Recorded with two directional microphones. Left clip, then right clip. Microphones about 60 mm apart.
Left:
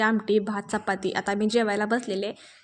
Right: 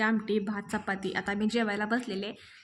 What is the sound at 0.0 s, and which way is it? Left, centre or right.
A woman's voice, left.